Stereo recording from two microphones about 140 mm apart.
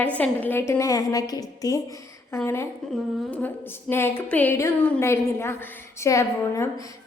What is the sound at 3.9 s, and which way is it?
A woman's voice, 15° left (ahead or behind).